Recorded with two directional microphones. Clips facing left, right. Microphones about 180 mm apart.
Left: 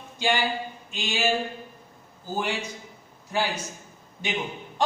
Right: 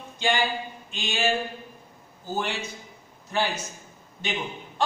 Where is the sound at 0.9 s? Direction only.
10° left (ahead or behind).